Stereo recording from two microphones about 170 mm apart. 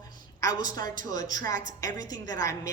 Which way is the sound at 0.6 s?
25° left (ahead or behind).